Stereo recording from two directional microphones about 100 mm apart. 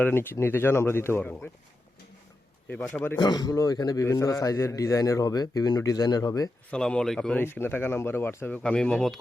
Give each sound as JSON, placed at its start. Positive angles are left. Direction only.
{"t": 0.0, "sound": "speech", "side_deg": 20}
{"t": 2.6, "sound": "speech", "side_deg": 15}
{"t": 3.2, "sound": "a man's voice", "side_deg": 45}
{"t": 4.0, "sound": "a man's voice", "side_deg": 30}
{"t": 6.7, "sound": "speech", "side_deg": 10}
{"t": 7.4, "sound": "speech", "side_deg": 20}